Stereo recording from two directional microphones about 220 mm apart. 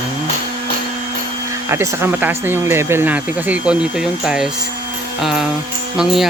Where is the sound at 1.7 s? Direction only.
10° right (ahead or behind).